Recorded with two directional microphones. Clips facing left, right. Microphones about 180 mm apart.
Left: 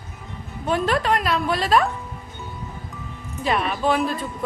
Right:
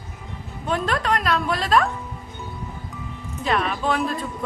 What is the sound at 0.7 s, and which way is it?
A man's voice, 5° left (ahead or behind).